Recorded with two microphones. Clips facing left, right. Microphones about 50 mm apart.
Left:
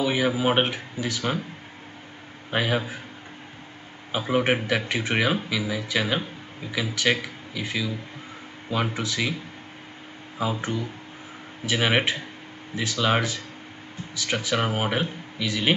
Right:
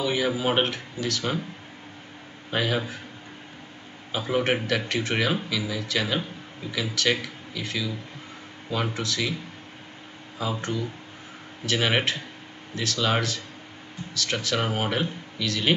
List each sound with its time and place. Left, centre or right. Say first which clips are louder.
0.0 s speech: left 2 dB; centre
2.5 s speech: left 1 dB; centre
4.2 s speech: left 2 dB; centre
10.5 s speech: left 1 dB; centre